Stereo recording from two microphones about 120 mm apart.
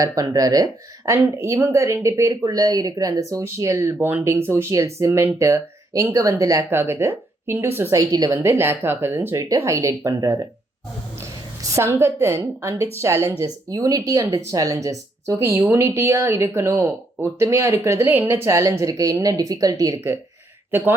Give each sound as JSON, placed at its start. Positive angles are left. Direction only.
{"t": 0.0, "sound": "speech", "side_deg": -30}
{"t": 8.1, "sound": "a woman's voice", "side_deg": -30}
{"t": 8.4, "sound": "speech", "side_deg": -20}
{"t": 11.6, "sound": "speech", "side_deg": -25}
{"t": 20.7, "sound": "speech", "side_deg": -20}